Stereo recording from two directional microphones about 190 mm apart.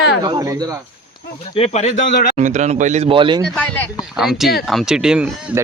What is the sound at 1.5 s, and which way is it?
Speech, 35° left (ahead or behind).